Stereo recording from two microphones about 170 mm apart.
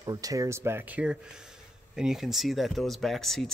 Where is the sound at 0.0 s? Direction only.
20° right (ahead or behind).